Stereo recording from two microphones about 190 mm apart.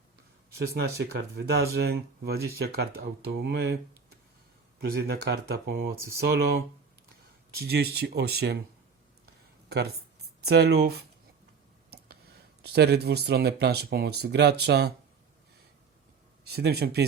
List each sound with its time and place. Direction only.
0.7 s speech: 55° right (ahead or behind)
4.8 s speech: 55° right (ahead or behind)
7.5 s speech: 55° right (ahead or behind)
9.6 s speech: 60° right (ahead or behind)
11.9 s a sound: 60° right (ahead or behind)
12.6 s speech: 60° right (ahead or behind)
16.4 s speech: 55° right (ahead or behind)